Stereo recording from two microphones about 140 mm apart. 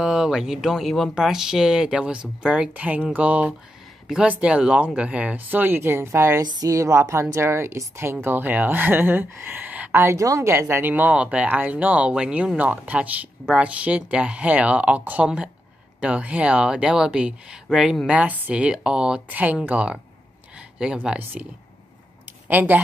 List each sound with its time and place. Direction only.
0.0 s a woman's voice: 5° right (ahead or behind)
22.5 s speech: 10° right (ahead or behind)